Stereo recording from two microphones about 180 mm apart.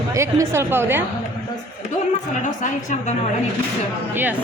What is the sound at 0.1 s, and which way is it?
Speech, 15° right (ahead or behind).